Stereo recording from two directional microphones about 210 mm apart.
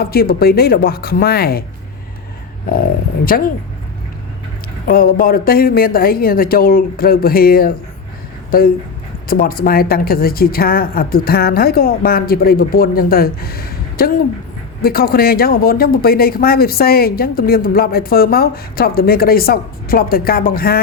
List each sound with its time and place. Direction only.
0.0 s speech: 45° left (ahead or behind)
2.6 s speech: 45° left (ahead or behind)
4.9 s speech: 45° left (ahead or behind)